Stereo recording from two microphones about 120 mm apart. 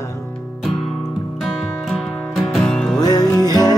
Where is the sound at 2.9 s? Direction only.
30° left (ahead or behind).